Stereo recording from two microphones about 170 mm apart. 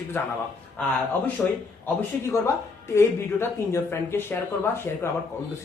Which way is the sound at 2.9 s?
15° left (ahead or behind).